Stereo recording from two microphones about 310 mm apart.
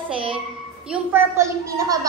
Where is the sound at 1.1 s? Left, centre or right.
Centre.